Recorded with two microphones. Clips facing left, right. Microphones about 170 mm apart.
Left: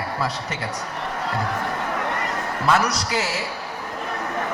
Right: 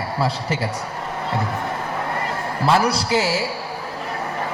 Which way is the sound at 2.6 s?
30° right (ahead or behind).